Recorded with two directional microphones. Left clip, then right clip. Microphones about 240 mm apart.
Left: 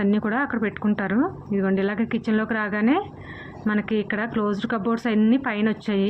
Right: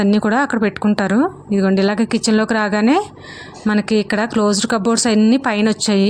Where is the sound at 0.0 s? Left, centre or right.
Right.